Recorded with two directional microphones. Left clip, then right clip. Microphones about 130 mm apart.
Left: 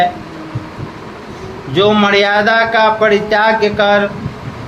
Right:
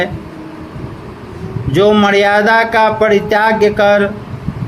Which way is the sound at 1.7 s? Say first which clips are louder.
Right 1 dB; 90° right.